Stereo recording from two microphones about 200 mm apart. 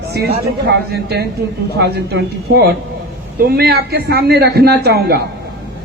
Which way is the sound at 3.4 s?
50° right (ahead or behind).